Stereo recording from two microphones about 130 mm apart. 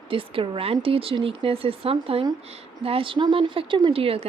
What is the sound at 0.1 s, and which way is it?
Speech, 45° right (ahead or behind).